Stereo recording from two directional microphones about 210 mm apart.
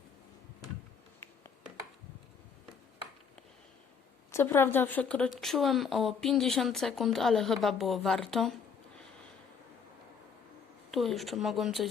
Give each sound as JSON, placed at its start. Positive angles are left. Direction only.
{"t": 4.3, "sound": "a woman's voice", "side_deg": 10}
{"t": 10.9, "sound": "a woman's voice", "side_deg": 0}